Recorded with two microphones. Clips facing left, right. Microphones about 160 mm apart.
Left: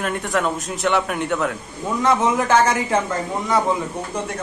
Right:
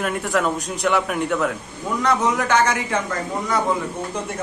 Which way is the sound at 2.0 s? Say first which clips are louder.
Left 2 dB; 25° left (ahead or behind).